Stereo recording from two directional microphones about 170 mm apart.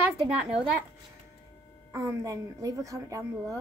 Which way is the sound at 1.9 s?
15° right (ahead or behind).